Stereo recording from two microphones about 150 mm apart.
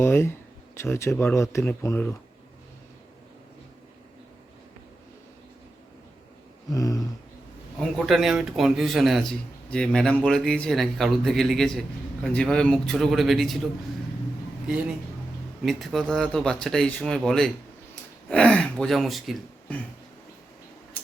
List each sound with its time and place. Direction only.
0.0 s a man's voice: 15° left (ahead or behind)
6.7 s a sound: 25° left (ahead or behind)
7.8 s a man's voice: centre (ahead or behind)
15.6 s a man's voice: centre (ahead or behind)